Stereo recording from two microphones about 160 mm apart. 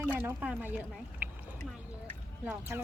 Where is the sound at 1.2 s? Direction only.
10° right (ahead or behind).